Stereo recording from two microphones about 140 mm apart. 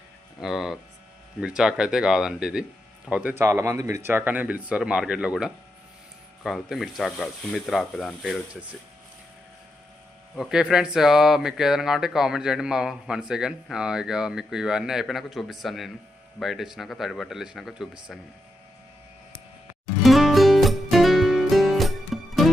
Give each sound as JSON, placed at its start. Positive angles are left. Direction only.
{"t": 0.3, "sound": "speech", "side_deg": 0}
{"t": 10.3, "sound": "speech", "side_deg": -5}
{"t": 20.0, "sound": "music", "side_deg": 0}